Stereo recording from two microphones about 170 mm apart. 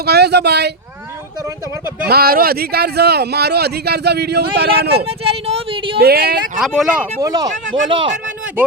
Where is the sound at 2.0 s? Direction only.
60° right (ahead or behind).